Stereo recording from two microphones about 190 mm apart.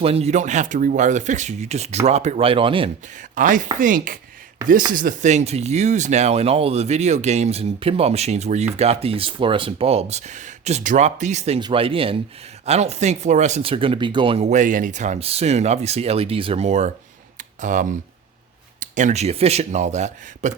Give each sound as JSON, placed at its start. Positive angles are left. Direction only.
{"t": 0.0, "sound": "speech", "side_deg": -30}
{"t": 3.3, "sound": "speech", "side_deg": -45}
{"t": 17.3, "sound": "a sound", "side_deg": -40}
{"t": 18.8, "sound": "speech", "side_deg": -40}